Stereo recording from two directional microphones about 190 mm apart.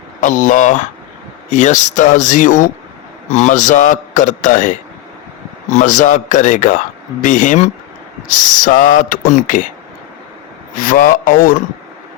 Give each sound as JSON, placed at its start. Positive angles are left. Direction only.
{"t": 0.2, "sound": "a man's voice", "side_deg": 40}
{"t": 10.8, "sound": "speech", "side_deg": 45}